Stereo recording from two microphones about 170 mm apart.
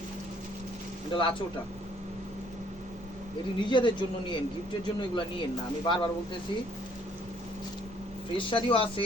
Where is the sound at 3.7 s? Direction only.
25° left (ahead or behind).